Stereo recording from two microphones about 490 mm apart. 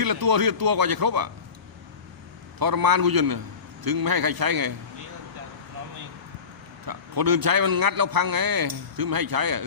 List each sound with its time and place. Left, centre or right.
0.0 s a man's voice: right
2.6 s a man's voice: right
6.8 s a man's voice: right